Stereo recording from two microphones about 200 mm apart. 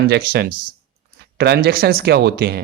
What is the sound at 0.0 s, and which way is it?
Speech, 50° right (ahead or behind).